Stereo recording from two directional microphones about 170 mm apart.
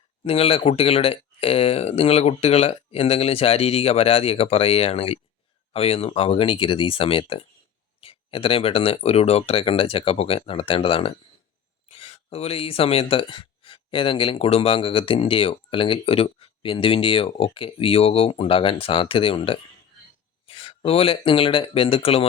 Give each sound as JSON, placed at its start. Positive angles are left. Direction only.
{"t": 0.3, "sound": "speech", "side_deg": 35}